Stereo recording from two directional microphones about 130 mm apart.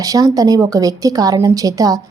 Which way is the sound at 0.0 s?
25° right (ahead or behind).